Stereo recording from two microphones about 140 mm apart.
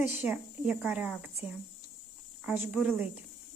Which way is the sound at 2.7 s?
Centre (ahead or behind).